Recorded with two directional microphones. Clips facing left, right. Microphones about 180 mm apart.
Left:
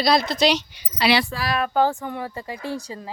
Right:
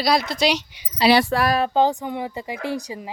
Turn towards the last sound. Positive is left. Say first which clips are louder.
# right 3 dB
turn(degrees=-15)  # may be behind; listen again after turning